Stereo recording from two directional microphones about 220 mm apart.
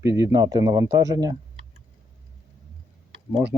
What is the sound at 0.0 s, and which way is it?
Speech, 15° right (ahead or behind).